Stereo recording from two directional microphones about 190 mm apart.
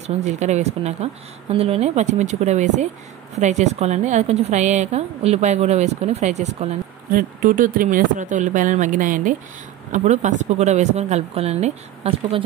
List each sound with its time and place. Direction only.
0.0 s a woman's voice: 35° right (ahead or behind)